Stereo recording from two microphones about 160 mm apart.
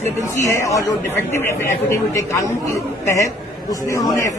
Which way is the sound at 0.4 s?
20° left (ahead or behind).